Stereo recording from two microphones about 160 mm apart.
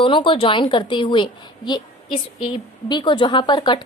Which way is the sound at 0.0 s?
30° left (ahead or behind).